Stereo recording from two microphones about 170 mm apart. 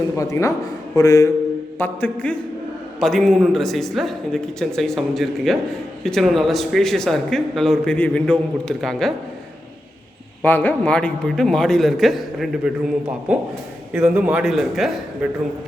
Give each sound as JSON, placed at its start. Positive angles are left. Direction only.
{"t": 0.2, "sound": "speech", "side_deg": 20}
{"t": 1.8, "sound": "a man's voice", "side_deg": 10}
{"t": 10.4, "sound": "a man's voice", "side_deg": 10}